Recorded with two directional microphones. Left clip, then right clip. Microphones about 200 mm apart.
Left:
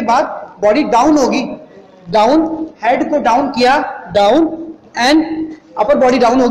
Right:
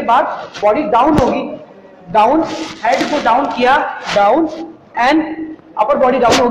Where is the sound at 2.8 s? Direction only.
50° left (ahead or behind).